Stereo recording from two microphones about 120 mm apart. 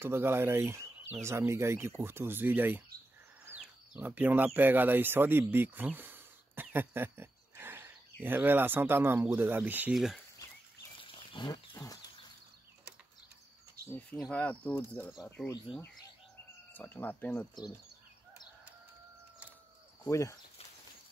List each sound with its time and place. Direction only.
0.0 s speech: 20° right (ahead or behind)
3.5 s a sound: 10° right (ahead or behind)
4.6 s speech: 15° right (ahead or behind)
9.9 s speech: centre (ahead or behind)
11.0 s wild animals: 45° left (ahead or behind)
11.7 s a sound: 30° left (ahead or behind)
14.3 s speech: 10° left (ahead or behind)
16.7 s speech: 15° left (ahead or behind)
20.1 s speech: 25° left (ahead or behind)